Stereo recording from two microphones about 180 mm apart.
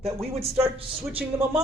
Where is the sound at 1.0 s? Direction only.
10° right (ahead or behind).